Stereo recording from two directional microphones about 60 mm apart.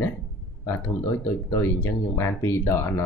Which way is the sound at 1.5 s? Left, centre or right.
Left.